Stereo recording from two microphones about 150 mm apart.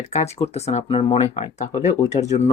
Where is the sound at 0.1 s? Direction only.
45° left (ahead or behind).